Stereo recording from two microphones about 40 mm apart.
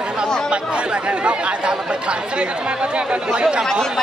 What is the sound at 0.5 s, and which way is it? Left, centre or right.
Speech, right.